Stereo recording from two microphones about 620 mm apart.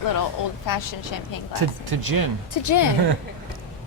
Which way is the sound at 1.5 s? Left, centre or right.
Right.